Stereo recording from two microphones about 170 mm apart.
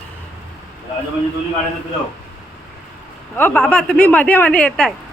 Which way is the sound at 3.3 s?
10° left (ahead or behind).